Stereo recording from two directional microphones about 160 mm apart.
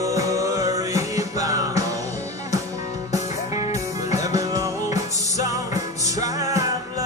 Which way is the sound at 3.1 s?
20° right (ahead or behind).